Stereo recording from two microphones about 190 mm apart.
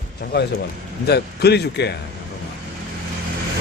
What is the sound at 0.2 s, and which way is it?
Speech, 60° left (ahead or behind).